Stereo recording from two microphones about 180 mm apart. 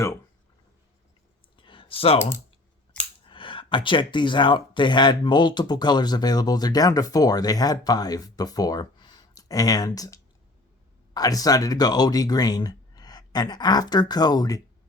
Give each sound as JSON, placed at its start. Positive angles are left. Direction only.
{"t": 1.5, "sound": "clicking", "side_deg": 30}
{"t": 3.2, "sound": "speech", "side_deg": 30}